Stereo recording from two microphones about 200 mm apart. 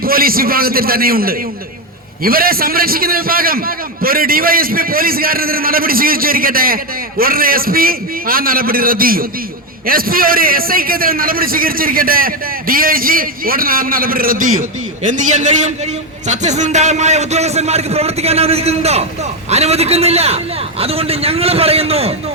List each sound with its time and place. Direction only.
0.0 s a man's voice: 45° right (ahead or behind); by 22.1 s 30° right (ahead or behind)